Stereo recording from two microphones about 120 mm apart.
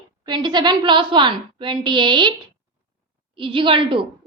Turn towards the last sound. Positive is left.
turn(degrees=-45)  # may be behind; listen again after turning